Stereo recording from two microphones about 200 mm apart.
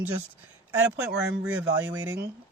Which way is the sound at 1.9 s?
20° right (ahead or behind).